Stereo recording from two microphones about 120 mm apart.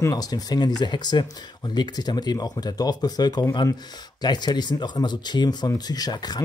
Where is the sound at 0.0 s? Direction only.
30° left (ahead or behind).